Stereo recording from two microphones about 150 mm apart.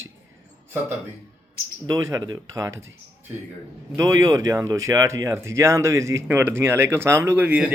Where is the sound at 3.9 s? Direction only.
20° right (ahead or behind).